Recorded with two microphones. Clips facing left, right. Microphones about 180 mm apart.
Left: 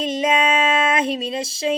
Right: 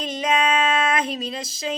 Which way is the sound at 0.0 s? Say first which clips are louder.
Left 3 dB; 25° left (ahead or behind).